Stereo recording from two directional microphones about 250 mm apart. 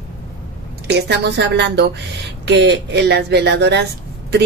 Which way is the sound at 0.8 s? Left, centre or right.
Right.